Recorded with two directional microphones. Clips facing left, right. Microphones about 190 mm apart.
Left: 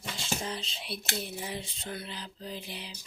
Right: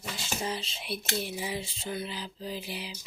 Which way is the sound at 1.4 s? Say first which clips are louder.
Right 3 dB; 5° right (ahead or behind).